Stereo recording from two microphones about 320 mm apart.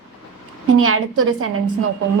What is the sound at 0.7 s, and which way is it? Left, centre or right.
Speech, right.